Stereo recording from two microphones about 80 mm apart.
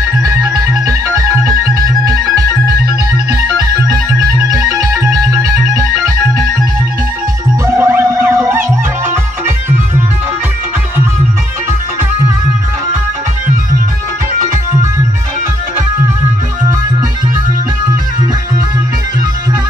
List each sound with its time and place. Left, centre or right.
0.2 s music: right
3.5 s music: right
7.6 s music: right